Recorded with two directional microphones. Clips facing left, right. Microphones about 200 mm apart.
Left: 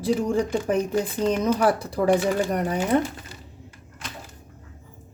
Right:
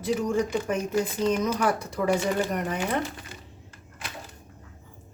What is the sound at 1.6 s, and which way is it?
Speech, 35° left (ahead or behind).